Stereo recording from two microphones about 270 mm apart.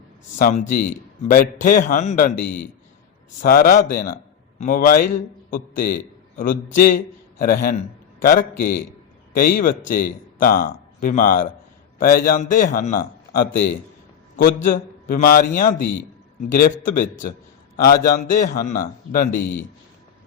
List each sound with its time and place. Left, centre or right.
0.3 s a man's voice: left
15.0 s a man's voice: left